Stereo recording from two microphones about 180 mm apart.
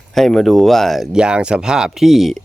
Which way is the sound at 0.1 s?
Centre (ahead or behind).